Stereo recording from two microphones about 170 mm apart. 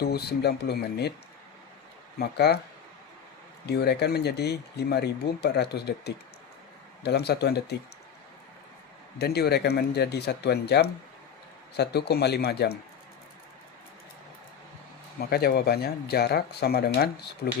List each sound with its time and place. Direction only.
0.0 s speech: 70° left (ahead or behind)
2.1 s speech: 70° left (ahead or behind)
3.7 s speech: 75° left (ahead or behind)
9.1 s speech: 70° left (ahead or behind)
15.2 s speech: 70° left (ahead or behind)